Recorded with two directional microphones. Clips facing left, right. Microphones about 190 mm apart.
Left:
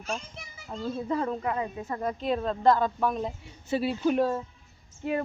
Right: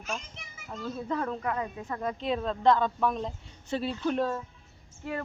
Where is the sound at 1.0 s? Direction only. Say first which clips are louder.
Left 2 dB; 10° left (ahead or behind).